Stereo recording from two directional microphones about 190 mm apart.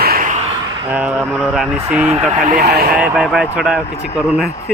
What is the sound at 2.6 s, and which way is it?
Speech, 55° right (ahead or behind).